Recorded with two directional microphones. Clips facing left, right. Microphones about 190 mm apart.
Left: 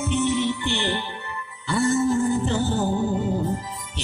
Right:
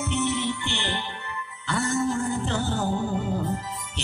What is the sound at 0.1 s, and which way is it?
Music, 15° left (ahead or behind).